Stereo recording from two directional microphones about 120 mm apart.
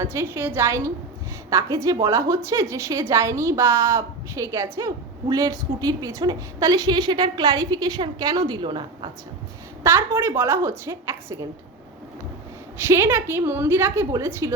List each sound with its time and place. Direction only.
0.0 s a woman's voice: 20° right (ahead or behind); by 9.0 s 40° right (ahead or behind)
9.8 s a woman's voice: 20° right (ahead or behind)
12.9 s a woman's voice: 20° right (ahead or behind)